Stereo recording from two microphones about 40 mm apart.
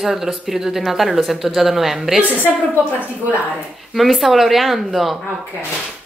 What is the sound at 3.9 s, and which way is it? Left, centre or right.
Speech, centre.